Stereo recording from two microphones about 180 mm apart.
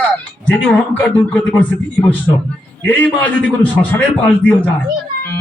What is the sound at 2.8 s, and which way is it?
A man's voice, 10° left (ahead or behind).